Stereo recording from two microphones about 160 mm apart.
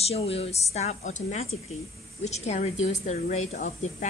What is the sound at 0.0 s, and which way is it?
A woman's voice, 40° left (ahead or behind).